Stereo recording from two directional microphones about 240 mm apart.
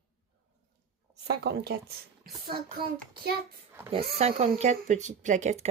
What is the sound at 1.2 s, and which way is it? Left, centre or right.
Speech, right.